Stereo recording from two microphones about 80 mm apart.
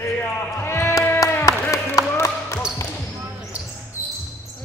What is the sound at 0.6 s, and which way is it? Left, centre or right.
Bleat, left.